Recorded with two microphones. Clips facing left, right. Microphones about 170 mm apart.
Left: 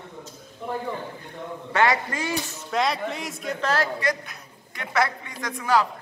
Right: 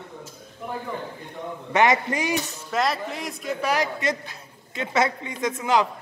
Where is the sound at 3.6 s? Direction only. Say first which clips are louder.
Even; 15° right (ahead or behind).